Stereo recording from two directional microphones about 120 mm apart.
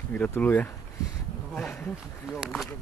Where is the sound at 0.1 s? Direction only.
15° left (ahead or behind).